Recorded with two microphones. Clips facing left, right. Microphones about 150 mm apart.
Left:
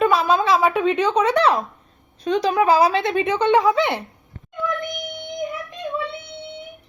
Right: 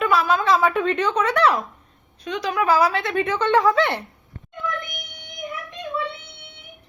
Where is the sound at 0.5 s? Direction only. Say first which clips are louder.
Left 2 dB; 15° left (ahead or behind).